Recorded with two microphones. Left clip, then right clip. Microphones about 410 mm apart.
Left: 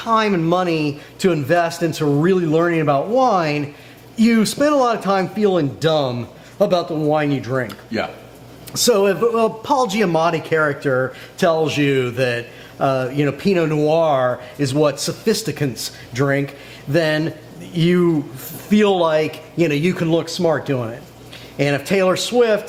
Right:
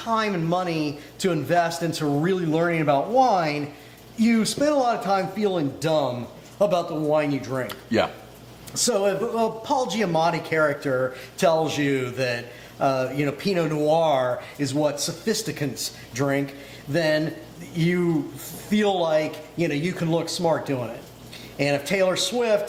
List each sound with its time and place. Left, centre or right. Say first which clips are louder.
0.0 s speech: left 7 dB; left
8.7 s speech: left 7 dB; left